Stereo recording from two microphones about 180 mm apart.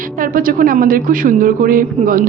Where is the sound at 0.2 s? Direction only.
50° right (ahead or behind).